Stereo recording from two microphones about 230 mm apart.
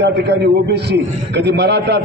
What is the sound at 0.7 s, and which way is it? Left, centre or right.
A man's voice, right.